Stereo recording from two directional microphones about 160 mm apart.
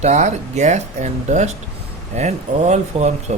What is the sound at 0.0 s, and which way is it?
Speech, 45° right (ahead or behind).